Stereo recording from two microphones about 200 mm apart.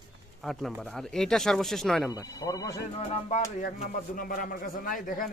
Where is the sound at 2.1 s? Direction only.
20° left (ahead or behind).